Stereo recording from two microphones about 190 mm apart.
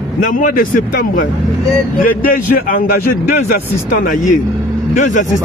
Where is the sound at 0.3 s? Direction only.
45° left (ahead or behind).